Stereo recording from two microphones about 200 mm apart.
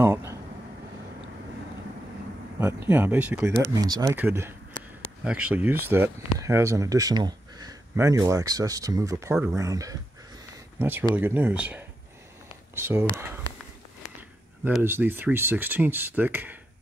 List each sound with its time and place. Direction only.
0.0 s air conditioning: 15° right (ahead or behind)
2.6 s speech: 10° right (ahead or behind)
9.3 s speech: 5° right (ahead or behind)
9.6 s speech: 15° right (ahead or behind)
14.8 s speech: 10° right (ahead or behind)